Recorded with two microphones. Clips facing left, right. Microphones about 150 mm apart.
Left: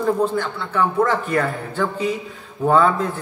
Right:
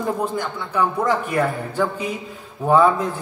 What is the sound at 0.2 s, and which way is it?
A man's voice, 15° right (ahead or behind).